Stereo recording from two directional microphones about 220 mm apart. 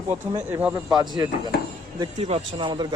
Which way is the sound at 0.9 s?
20° right (ahead or behind).